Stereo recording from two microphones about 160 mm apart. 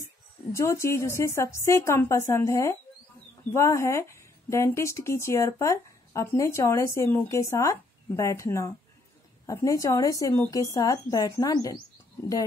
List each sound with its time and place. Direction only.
0.5 s a woman's voice: 15° left (ahead or behind)